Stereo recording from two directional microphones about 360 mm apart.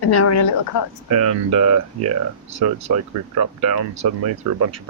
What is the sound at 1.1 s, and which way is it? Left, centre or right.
Speech, right.